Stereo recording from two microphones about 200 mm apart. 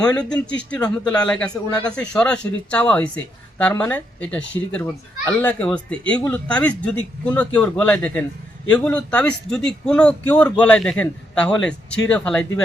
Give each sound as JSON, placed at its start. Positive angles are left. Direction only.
{"t": 0.4, "sound": "speech", "side_deg": 5}